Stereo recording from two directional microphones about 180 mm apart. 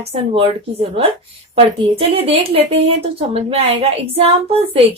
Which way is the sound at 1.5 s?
30° right (ahead or behind).